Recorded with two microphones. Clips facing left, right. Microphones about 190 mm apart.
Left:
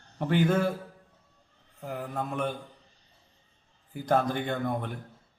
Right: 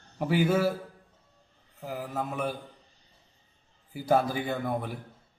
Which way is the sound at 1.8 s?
5° right (ahead or behind).